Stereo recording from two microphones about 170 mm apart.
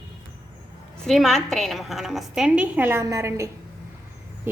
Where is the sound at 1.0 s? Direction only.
Centre (ahead or behind).